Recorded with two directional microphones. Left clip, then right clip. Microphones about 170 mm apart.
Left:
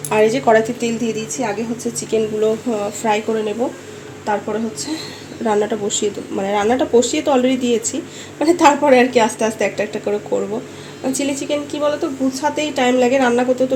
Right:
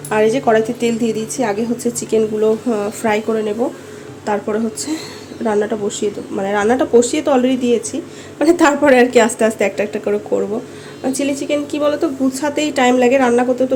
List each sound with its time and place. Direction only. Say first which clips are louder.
0.1 s speech: even; centre (ahead or behind)
0.9 s a woman's voice: right 3 dB; 20° right (ahead or behind)
2.0 s a woman's voice: right 2 dB; 15° right (ahead or behind)
3.2 s speech: right 2 dB; centre (ahead or behind)
5.4 s a woman's voice: right 1 dB; centre (ahead or behind)
11.8 s a woman's voice: right 2 dB; 25° right (ahead or behind); by 13.7 s 5° right (ahead or behind)